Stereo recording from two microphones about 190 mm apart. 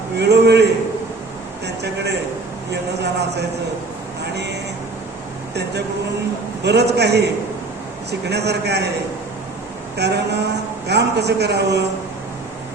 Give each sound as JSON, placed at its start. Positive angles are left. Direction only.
{"t": 0.2, "sound": "a man's voice", "side_deg": -60}
{"t": 1.6, "sound": "a sound", "side_deg": -60}
{"t": 3.0, "sound": "a man's voice", "side_deg": -60}
{"t": 6.6, "sound": "a man's voice", "side_deg": -60}
{"t": 8.3, "sound": "a man's voice", "side_deg": -60}
{"t": 10.0, "sound": "a man's voice", "side_deg": -60}